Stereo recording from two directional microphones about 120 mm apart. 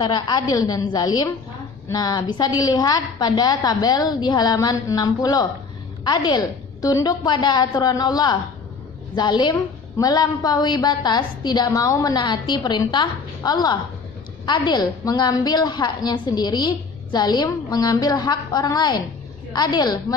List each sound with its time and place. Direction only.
0.0 s a woman's voice: 35° left (ahead or behind)